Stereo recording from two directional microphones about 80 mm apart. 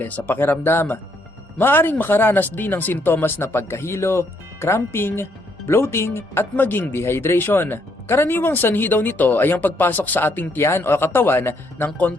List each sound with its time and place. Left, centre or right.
0.0 s speech: left
10.6 s speech: left